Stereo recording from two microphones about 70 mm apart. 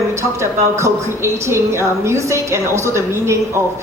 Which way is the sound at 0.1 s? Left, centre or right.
Right.